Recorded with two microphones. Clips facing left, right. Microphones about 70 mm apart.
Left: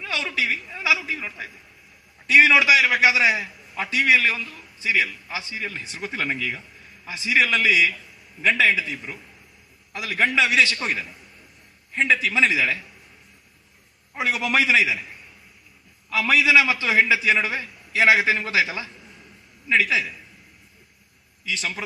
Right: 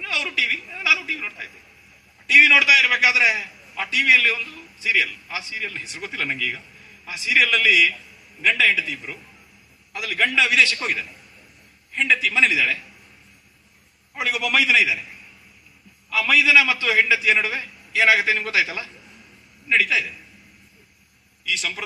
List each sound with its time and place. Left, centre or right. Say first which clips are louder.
0.0 s a man's voice: even; left
9.9 s a man's voice: even; left
14.2 s a man's voice: even; left
16.0 s a man's voice: even; left
21.4 s a man's voice: right 1 dB; left